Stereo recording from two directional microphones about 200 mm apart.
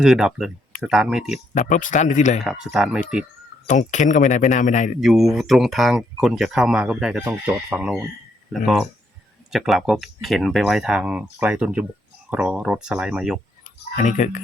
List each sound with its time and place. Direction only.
0.0 s speech: 5° right (ahead or behind)
1.5 s speech: 40° left (ahead or behind)
2.4 s speech: centre (ahead or behind)
3.7 s speech: 40° left (ahead or behind)
4.9 s speech: centre (ahead or behind)
13.9 s speech: 40° left (ahead or behind)